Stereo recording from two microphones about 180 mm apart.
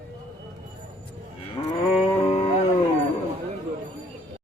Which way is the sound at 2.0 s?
30° left (ahead or behind).